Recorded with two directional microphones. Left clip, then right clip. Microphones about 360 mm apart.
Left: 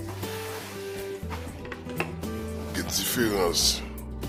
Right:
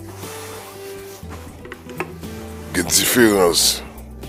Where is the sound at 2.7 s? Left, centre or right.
Right.